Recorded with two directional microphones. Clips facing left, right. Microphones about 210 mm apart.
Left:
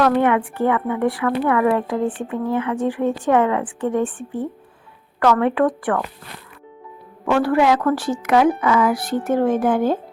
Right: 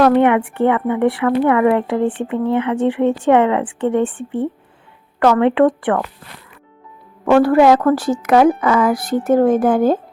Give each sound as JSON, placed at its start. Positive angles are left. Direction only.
{"t": 0.0, "sound": "speech", "side_deg": -20}
{"t": 5.2, "sound": "speech", "side_deg": -20}
{"t": 7.3, "sound": "a woman's voice", "side_deg": -45}